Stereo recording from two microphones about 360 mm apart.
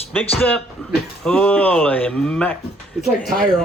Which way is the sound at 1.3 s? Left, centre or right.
Centre.